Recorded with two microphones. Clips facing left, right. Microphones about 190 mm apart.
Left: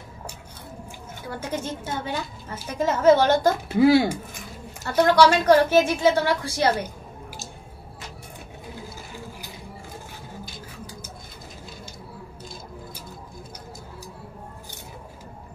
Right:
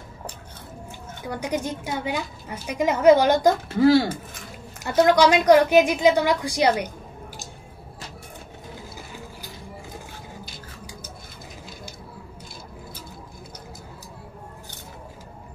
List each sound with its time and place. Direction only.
1.3 s a woman's voice: 15° right (ahead or behind)
3.6 s speech: 10° left (ahead or behind)
4.8 s a woman's voice: 15° right (ahead or behind)